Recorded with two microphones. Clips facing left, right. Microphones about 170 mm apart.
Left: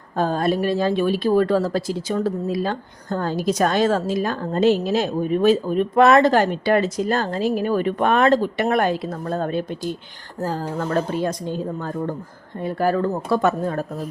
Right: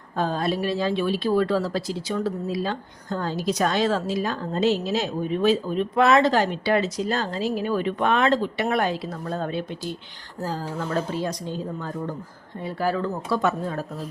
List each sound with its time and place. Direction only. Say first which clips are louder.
0.2 s a woman's voice: left 4 dB; 45° left (ahead or behind)